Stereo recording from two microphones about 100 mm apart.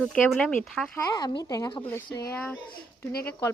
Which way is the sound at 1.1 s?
45° left (ahead or behind).